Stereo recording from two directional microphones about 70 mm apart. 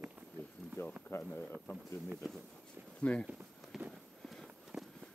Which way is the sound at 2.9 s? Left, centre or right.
Centre.